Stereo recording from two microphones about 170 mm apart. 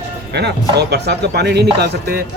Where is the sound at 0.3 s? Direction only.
75° right (ahead or behind).